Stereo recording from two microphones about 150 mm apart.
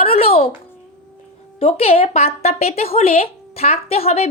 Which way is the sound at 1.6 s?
40° left (ahead or behind).